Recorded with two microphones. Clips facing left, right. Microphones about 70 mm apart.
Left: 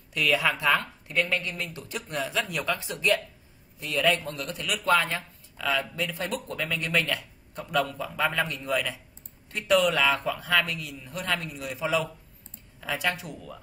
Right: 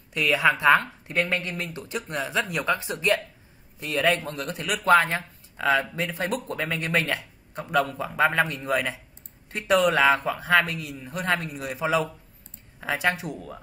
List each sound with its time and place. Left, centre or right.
0.1 s speech: right
1.0 s speech: right
1.7 s speech: centre
2.9 s speech: right
4.8 s speech: right